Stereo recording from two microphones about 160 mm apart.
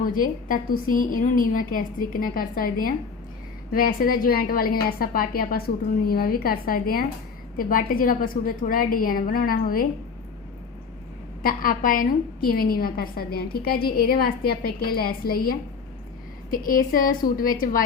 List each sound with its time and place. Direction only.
0.0 s a woman's voice: 60° left (ahead or behind)
11.4 s a woman's voice: 65° left (ahead or behind)